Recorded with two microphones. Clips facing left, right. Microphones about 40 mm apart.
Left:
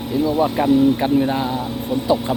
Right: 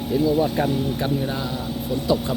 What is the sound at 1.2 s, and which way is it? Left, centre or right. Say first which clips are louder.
Speech: left 8 dB; left.